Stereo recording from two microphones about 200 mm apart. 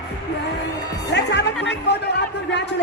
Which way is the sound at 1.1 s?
60° left (ahead or behind).